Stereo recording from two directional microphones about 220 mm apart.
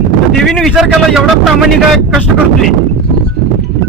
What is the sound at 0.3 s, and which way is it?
A man's voice, centre (ahead or behind).